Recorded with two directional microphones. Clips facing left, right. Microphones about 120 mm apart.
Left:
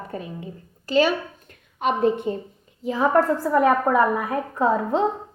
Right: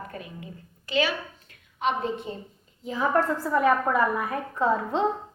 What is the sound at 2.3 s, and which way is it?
Speech, 50° left (ahead or behind).